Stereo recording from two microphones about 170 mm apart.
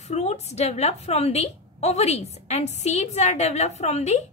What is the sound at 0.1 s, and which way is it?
A woman's voice, 40° left (ahead or behind).